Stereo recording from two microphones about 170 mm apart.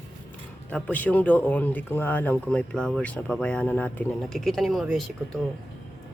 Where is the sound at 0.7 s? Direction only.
10° left (ahead or behind).